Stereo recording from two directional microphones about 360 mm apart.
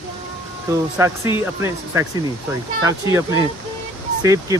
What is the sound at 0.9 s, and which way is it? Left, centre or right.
Speech, centre.